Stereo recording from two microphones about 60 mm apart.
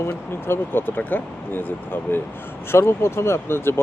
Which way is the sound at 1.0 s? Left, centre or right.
Left.